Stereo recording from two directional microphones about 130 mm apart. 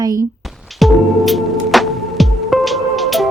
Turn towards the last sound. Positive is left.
turn(degrees=0)  # may be behind; listen again after turning